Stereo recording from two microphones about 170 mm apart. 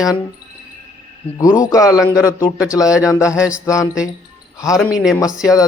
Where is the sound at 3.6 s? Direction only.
20° left (ahead or behind).